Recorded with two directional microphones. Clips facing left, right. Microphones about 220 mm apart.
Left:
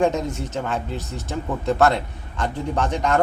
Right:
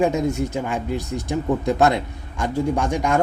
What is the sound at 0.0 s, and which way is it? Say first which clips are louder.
A man's voice: right 2 dB; 10° right (ahead or behind).